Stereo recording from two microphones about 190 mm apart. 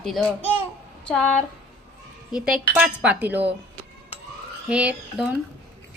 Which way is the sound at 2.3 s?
5° right (ahead or behind).